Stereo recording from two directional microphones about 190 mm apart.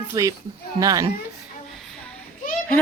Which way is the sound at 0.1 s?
20° right (ahead or behind).